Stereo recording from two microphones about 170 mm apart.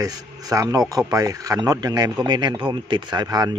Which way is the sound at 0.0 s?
20° right (ahead or behind).